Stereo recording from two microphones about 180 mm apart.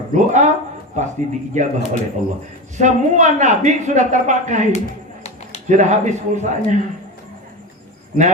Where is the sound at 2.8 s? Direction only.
40° right (ahead or behind).